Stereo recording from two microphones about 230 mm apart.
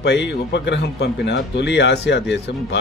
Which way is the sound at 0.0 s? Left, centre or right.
Left.